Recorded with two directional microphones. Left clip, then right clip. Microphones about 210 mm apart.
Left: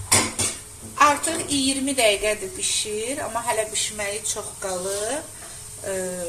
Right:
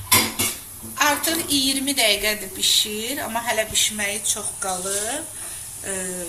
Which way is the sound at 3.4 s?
30° left (ahead or behind).